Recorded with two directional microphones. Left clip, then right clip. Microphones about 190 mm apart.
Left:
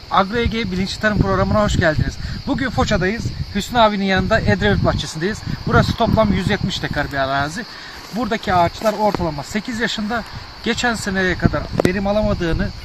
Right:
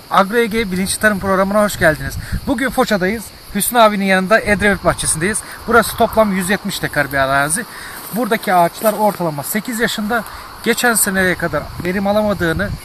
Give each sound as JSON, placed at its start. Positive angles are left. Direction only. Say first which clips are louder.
{"t": 0.1, "sound": "speech", "louder": "right 4 dB", "side_deg": -15}
{"t": 4.9, "sound": "speech", "louder": "right 3 dB", "side_deg": 0}
{"t": 5.2, "sound": "speech", "louder": "right 4 dB", "side_deg": -15}